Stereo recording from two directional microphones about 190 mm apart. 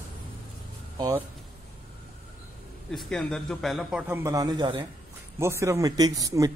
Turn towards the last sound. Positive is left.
turn(degrees=-20)  # may be behind; listen again after turning